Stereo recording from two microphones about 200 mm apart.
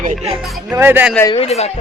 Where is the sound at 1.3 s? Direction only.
30° left (ahead or behind).